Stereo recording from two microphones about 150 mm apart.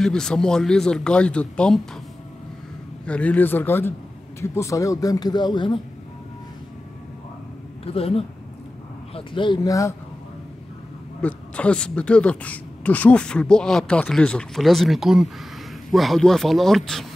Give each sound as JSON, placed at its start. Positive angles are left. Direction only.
{"t": 0.0, "sound": "speech", "side_deg": 5}
{"t": 3.1, "sound": "a man's voice", "side_deg": 10}
{"t": 7.8, "sound": "a man's voice", "side_deg": 40}
{"t": 11.1, "sound": "speech", "side_deg": 10}